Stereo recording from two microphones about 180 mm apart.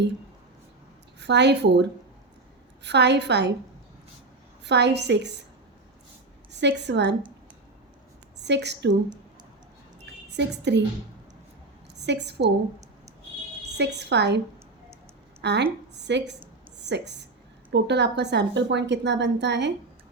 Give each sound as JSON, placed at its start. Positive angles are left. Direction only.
{"t": 1.2, "sound": "a woman's voice", "side_deg": -70}
{"t": 4.6, "sound": "a woman's voice", "side_deg": -70}
{"t": 6.5, "sound": "a woman's voice", "side_deg": -75}
{"t": 8.4, "sound": "a woman's voice", "side_deg": -70}
{"t": 10.3, "sound": "a woman's voice", "side_deg": -70}
{"t": 11.9, "sound": "a woman's voice", "side_deg": -70}
{"t": 13.7, "sound": "a woman's voice", "side_deg": -70}